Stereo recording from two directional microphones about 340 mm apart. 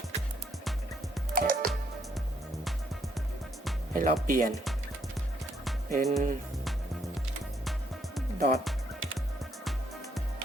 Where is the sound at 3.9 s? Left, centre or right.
Right.